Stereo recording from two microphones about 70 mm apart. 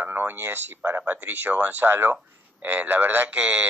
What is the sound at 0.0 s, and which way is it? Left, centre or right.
Speech, right.